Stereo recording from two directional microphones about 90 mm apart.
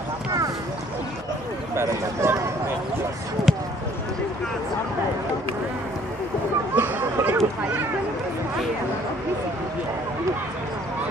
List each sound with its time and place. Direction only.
1.8 s speech: 30° right (ahead or behind)
3.4 s speech: centre (ahead or behind)
6.7 s speech: 20° right (ahead or behind)